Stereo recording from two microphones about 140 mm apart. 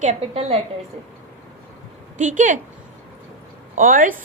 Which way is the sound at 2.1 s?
65° right (ahead or behind).